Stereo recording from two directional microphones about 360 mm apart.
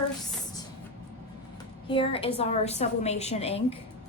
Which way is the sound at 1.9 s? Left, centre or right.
Centre.